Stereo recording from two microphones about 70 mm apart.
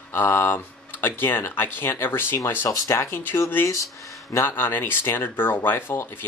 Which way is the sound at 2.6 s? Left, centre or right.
Left.